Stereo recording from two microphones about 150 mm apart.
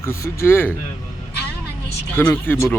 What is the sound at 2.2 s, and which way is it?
Speech, 15° left (ahead or behind).